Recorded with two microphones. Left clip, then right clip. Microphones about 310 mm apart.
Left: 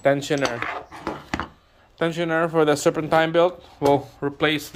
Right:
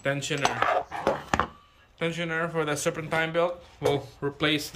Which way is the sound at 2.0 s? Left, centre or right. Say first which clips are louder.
Left 7 dB; centre.